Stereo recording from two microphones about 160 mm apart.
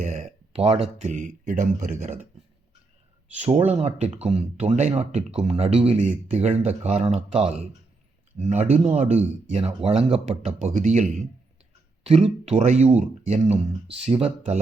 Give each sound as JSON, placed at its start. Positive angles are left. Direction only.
{"t": 0.0, "sound": "speech", "side_deg": -45}
{"t": 3.3, "sound": "speech", "side_deg": -45}